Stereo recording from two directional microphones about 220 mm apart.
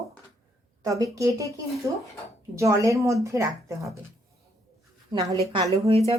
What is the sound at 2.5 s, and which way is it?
A woman's voice, 15° right (ahead or behind).